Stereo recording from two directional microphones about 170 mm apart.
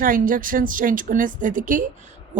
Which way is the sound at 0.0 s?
55° right (ahead or behind).